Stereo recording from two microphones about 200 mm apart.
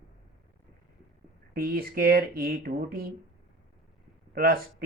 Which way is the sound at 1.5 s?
50° right (ahead or behind).